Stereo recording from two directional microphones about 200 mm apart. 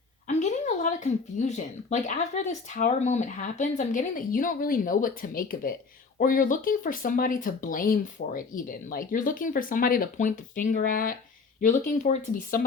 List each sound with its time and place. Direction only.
0.3 s speech: 35° left (ahead or behind)